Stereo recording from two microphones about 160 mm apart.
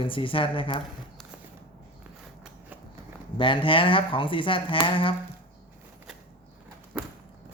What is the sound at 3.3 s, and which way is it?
Speech, 30° left (ahead or behind).